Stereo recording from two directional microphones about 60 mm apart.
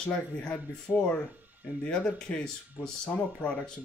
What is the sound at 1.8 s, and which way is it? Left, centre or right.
Speech, centre.